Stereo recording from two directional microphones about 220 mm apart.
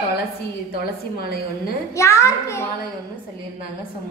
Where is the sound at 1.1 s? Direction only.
45° left (ahead or behind).